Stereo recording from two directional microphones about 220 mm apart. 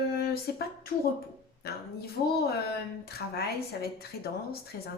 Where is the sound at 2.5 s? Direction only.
45° left (ahead or behind).